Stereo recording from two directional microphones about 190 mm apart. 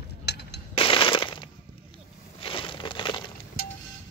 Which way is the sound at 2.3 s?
25° left (ahead or behind).